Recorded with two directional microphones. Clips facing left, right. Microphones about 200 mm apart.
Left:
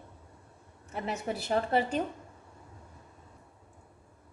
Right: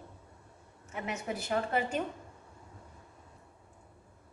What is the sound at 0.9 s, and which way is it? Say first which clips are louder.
A woman's voice: left 3 dB; 35° left (ahead or behind).